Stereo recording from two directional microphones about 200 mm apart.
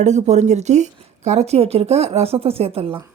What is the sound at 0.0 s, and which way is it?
Speech, 35° right (ahead or behind).